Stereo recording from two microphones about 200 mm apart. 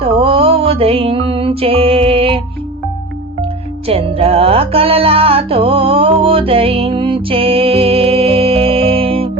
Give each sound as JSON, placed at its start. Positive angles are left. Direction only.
{"t": 0.0, "sound": "music", "side_deg": -25}
{"t": 3.8, "sound": "music", "side_deg": -30}